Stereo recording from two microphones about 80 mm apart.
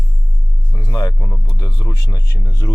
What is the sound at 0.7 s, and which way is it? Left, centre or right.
Speech, left.